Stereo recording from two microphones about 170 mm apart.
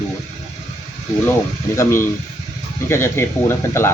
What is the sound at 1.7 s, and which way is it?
Speech, 15° left (ahead or behind).